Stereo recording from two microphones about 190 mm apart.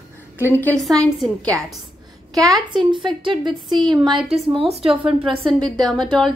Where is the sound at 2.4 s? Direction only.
20° right (ahead or behind).